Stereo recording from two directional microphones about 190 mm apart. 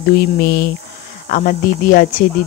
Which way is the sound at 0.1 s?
55° left (ahead or behind).